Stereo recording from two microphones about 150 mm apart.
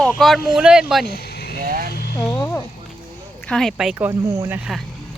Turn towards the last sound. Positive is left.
turn(degrees=0)  # may be behind; listen again after turning